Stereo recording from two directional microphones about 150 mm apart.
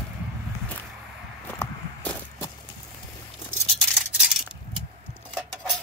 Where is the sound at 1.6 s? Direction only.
20° left (ahead or behind).